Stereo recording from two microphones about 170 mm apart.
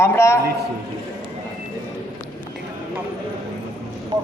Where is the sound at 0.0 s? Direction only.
15° left (ahead or behind).